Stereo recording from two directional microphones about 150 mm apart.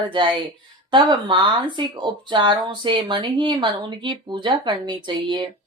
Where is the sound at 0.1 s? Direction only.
35° right (ahead or behind).